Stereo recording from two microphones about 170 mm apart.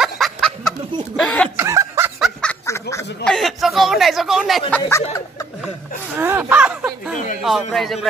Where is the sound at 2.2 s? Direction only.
5° left (ahead or behind).